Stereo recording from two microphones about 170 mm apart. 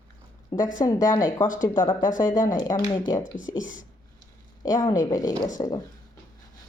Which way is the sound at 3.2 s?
50° left (ahead or behind).